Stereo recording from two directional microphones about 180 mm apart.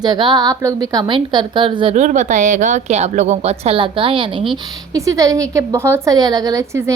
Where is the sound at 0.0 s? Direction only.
25° right (ahead or behind).